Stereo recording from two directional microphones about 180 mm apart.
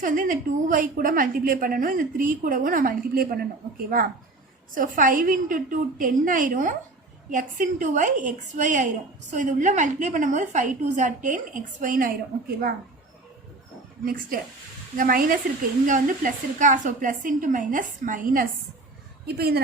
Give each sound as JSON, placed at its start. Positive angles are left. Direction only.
{"t": 0.0, "sound": "a woman's voice", "side_deg": -50}
{"t": 4.7, "sound": "a woman's voice", "side_deg": -50}
{"t": 14.0, "sound": "a woman's voice", "side_deg": -55}
{"t": 19.2, "sound": "a woman's voice", "side_deg": -65}